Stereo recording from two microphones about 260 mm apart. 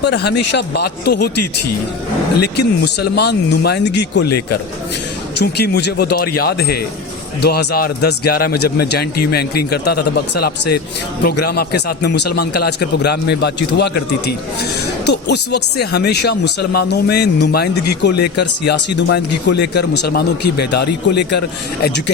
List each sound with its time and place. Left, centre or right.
0.0 s speech: left
2.4 s speech: left
4.3 s a man's voice: left
5.4 s speech: left
11.3 s speech: left